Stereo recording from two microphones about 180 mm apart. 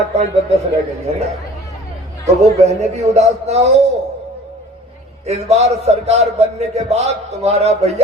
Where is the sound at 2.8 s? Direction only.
40° right (ahead or behind).